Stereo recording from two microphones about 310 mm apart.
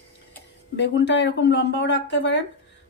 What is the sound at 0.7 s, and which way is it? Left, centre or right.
Speech, left.